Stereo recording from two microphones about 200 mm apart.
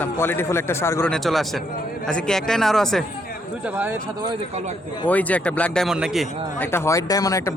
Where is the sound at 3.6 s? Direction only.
10° right (ahead or behind).